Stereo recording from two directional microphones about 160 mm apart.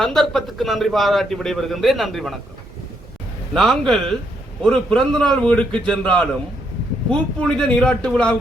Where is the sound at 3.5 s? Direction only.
Centre (ahead or behind).